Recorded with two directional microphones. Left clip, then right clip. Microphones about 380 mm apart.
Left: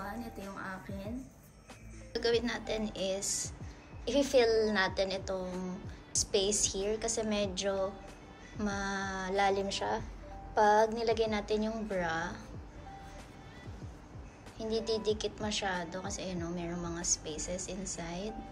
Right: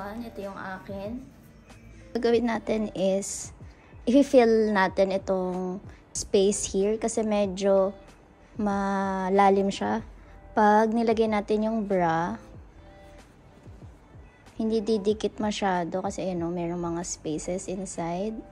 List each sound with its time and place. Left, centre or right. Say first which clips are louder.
0.0 s a woman's voice: right 6 dB; centre
2.1 s a woman's voice: right 7 dB; centre
14.7 s a woman's voice: right 7 dB; centre